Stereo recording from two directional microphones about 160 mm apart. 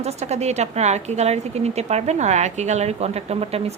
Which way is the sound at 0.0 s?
40° right (ahead or behind).